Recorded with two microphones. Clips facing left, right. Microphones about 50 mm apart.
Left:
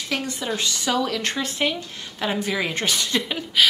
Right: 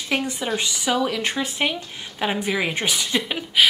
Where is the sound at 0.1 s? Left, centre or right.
Centre.